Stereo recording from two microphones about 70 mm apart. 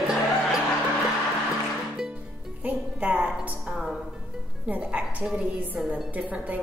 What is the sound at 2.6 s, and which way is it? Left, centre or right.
Music, centre.